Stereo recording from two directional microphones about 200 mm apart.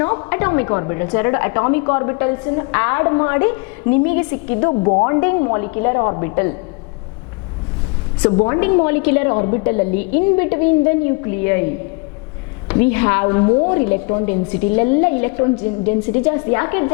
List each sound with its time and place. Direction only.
0.0 s a woman's voice: 15° left (ahead or behind)
4.7 s a woman's voice: 30° left (ahead or behind)
5.0 s a woman's voice: 15° left (ahead or behind)
8.2 s a woman's voice: 25° left (ahead or behind)